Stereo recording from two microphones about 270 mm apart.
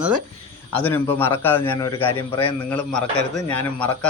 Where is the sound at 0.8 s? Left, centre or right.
Centre.